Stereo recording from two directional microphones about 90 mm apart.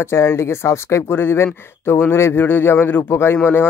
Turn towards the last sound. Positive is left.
turn(degrees=20)  # may be behind; listen again after turning